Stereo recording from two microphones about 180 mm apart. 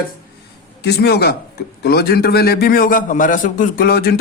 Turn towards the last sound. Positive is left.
turn(degrees=60)  # may be behind; listen again after turning